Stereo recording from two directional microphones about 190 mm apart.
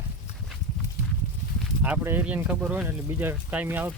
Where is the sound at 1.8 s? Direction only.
10° right (ahead or behind).